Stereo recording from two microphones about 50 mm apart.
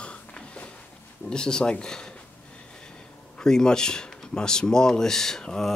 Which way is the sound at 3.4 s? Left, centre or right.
Centre.